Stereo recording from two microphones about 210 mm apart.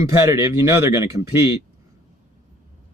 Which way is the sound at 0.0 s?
15° right (ahead or behind).